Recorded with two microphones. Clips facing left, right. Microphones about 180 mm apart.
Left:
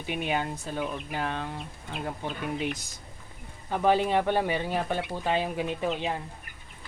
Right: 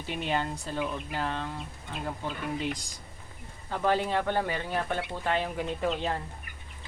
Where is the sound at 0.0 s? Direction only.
10° left (ahead or behind).